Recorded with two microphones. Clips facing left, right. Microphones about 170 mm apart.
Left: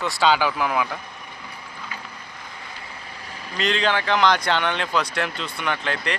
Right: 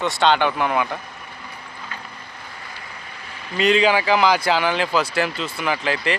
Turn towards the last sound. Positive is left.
turn(degrees=-5)  # may be behind; listen again after turning